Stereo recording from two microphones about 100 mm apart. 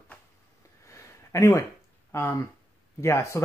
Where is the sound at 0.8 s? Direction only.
30° left (ahead or behind).